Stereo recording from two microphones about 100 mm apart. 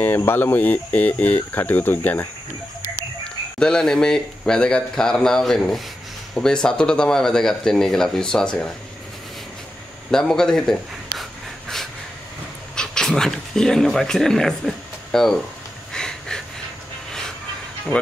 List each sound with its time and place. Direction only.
0.0 s speech: 25° left (ahead or behind)
3.5 s speech: 5° left (ahead or behind)
10.1 s a man's voice: 5° left (ahead or behind)
12.7 s speech: 5° left (ahead or behind)
15.9 s a sound: 5° left (ahead or behind)